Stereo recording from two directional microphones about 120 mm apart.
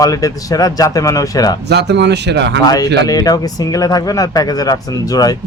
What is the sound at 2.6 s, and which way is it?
Speech, 30° left (ahead or behind).